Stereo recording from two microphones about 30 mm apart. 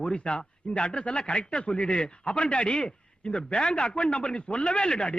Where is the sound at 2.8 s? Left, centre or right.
Left.